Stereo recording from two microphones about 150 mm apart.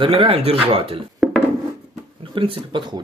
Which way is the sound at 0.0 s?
35° right (ahead or behind).